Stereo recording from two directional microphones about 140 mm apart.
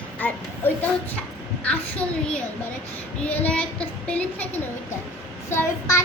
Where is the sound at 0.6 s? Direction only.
15° left (ahead or behind).